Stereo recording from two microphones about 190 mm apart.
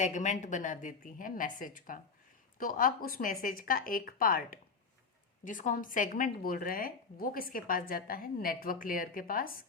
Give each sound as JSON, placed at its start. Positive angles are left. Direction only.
{"t": 0.0, "sound": "speech", "side_deg": 40}